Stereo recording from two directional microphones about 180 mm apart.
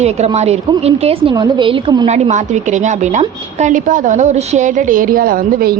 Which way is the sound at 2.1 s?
40° right (ahead or behind).